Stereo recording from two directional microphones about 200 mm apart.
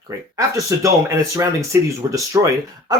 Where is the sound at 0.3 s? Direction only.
15° right (ahead or behind).